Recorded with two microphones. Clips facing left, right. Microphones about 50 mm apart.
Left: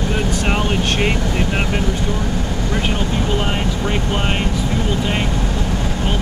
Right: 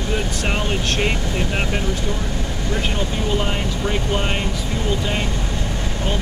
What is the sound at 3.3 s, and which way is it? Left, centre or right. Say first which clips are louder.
Speech: left 2 dB; centre.